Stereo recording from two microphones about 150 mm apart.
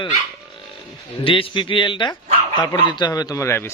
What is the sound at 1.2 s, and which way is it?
A man's voice, 35° left (ahead or behind).